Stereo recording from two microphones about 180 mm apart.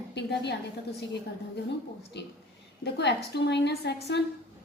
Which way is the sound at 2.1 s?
70° left (ahead or behind).